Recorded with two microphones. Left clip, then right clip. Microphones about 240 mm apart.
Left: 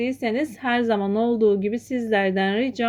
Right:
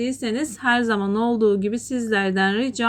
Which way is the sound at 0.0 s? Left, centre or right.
Centre.